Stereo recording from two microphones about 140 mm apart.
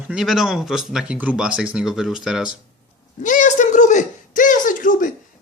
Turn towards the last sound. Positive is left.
turn(degrees=70)  # may be behind; listen again after turning